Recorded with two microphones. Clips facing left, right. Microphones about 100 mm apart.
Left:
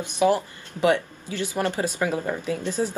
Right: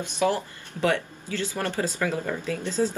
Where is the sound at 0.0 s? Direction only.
15° left (ahead or behind).